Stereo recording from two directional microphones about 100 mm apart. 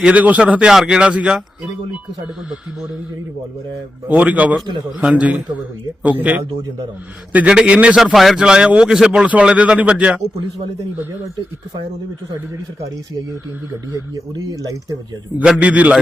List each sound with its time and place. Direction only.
0.0 s a man's voice: 15° right (ahead or behind)
4.1 s a man's voice: 15° right (ahead or behind)
4.6 s a man's voice: 45° right (ahead or behind)
4.9 s a man's voice: 10° right (ahead or behind)
8.1 s a man's voice: centre (ahead or behind)
13.9 s speech: 35° right (ahead or behind)
15.4 s a man's voice: 15° right (ahead or behind)